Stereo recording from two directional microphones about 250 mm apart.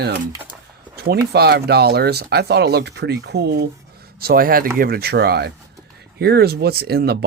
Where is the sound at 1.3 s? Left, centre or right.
Right.